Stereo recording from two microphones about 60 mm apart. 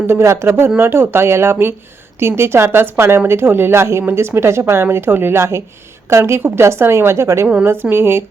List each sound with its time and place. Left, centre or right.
0.1 s a woman's voice: right
7.6 s a woman's voice: right